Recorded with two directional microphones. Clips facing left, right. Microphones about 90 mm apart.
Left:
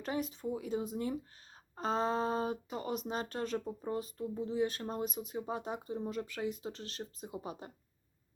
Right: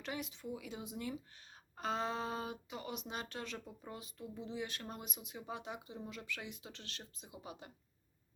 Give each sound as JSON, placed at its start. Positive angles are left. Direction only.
{"t": 0.0, "sound": "speech", "side_deg": 40}